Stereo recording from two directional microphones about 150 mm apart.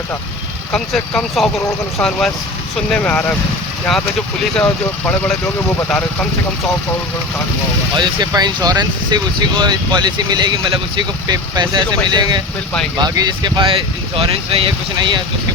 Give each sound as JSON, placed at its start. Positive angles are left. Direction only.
{"t": 0.7, "sound": "speech", "side_deg": 5}
{"t": 4.5, "sound": "speech", "side_deg": 10}
{"t": 7.9, "sound": "speech", "side_deg": -30}